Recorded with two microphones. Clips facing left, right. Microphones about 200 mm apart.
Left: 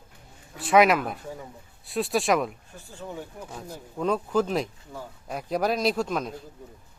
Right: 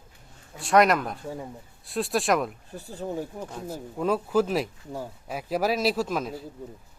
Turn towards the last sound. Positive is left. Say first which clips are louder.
# even
turn(degrees=-5)  # may be behind; listen again after turning